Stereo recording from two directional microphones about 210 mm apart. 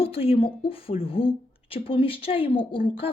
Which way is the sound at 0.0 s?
25° left (ahead or behind).